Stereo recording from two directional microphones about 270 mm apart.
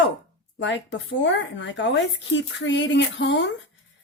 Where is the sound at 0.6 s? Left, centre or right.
Left.